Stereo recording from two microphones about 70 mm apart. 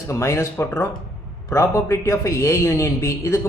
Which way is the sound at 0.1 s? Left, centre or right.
Left.